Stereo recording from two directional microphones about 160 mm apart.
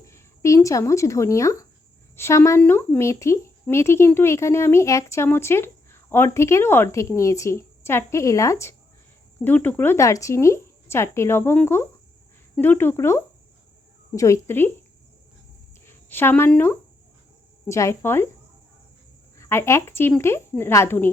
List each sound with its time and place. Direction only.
0.0 s speech: 20° left (ahead or behind)
15.9 s a woman's voice: 15° left (ahead or behind)
19.4 s speech: 15° left (ahead or behind)